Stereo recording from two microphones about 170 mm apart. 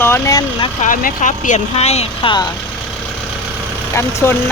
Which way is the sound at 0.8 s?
50° left (ahead or behind).